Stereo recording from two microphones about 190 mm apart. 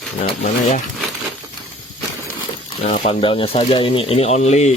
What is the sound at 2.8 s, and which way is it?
Speech, 40° left (ahead or behind).